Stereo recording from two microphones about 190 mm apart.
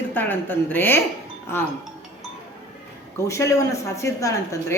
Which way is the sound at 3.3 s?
15° left (ahead or behind).